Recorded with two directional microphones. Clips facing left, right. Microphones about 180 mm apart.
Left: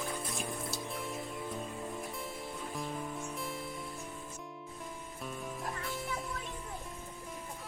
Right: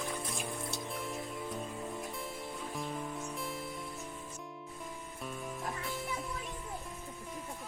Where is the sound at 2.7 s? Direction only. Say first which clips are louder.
Even; centre (ahead or behind).